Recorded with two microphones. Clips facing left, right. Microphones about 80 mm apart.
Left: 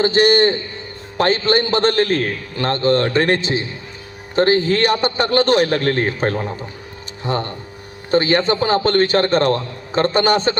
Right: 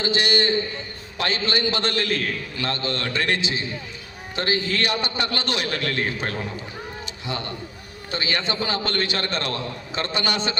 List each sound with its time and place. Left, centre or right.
0.0 s a man's voice: left